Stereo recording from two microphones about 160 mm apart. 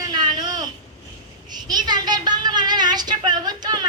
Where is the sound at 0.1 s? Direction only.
25° right (ahead or behind).